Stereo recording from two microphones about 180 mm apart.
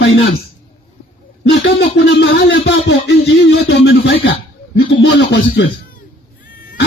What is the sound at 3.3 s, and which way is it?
Speech, 90° left.